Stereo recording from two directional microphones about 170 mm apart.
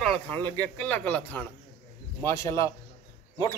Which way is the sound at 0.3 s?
10° left (ahead or behind).